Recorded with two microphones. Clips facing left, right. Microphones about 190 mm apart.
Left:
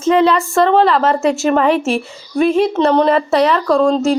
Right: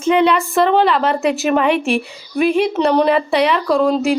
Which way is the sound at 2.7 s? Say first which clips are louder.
Left 1 dB; 15° right (ahead or behind).